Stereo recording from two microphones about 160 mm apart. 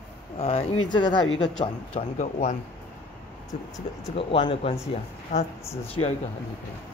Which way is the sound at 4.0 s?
35° left (ahead or behind).